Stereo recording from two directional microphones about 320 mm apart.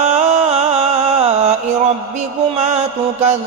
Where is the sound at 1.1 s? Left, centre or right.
Centre.